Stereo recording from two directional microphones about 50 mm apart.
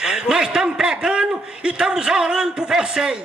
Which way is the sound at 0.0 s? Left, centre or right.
Centre.